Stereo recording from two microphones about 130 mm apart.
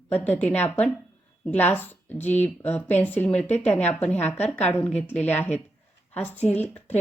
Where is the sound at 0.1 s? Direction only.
15° left (ahead or behind).